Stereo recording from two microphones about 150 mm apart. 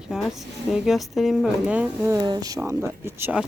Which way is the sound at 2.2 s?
25° right (ahead or behind).